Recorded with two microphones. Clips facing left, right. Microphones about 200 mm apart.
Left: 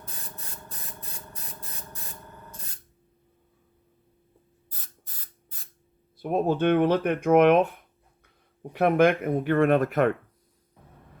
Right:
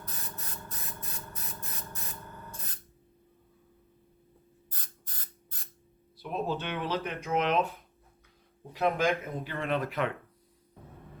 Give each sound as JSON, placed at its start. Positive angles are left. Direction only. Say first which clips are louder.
{"t": 0.0, "sound": "spray", "louder": "even", "side_deg": 30}
{"t": 4.7, "sound": "spray", "louder": "even", "side_deg": 5}
{"t": 6.1, "sound": "speech", "louder": "left 9 dB", "side_deg": 50}